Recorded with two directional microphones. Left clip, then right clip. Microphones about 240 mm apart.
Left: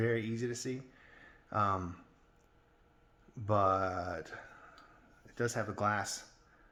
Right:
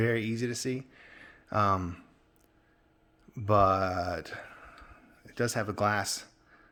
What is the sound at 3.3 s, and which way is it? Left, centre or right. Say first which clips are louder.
Speech: right 6 dB; right.